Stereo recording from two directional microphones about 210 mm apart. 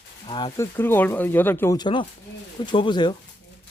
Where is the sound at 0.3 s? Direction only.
20° left (ahead or behind).